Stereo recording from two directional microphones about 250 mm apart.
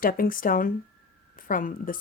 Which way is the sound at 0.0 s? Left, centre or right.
Left.